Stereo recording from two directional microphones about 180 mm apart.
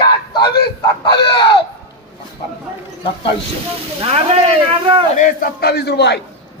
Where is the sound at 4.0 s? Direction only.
35° right (ahead or behind).